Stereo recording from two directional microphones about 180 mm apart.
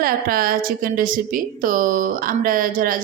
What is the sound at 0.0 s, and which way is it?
A woman's voice, 55° right (ahead or behind).